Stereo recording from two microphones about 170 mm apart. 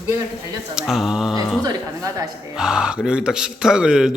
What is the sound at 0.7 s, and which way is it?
Speech, 5° right (ahead or behind).